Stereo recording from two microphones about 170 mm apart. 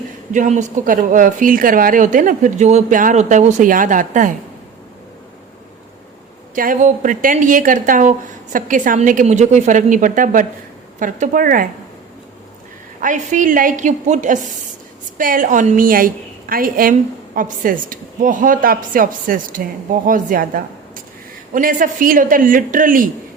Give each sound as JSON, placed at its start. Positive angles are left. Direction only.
{"t": 0.3, "sound": "a woman's voice", "side_deg": -45}
{"t": 6.5, "sound": "a woman's voice", "side_deg": -50}
{"t": 13.0, "sound": "a woman's voice", "side_deg": -50}